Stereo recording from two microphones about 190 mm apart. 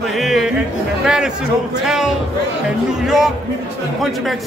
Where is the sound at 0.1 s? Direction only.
Centre (ahead or behind).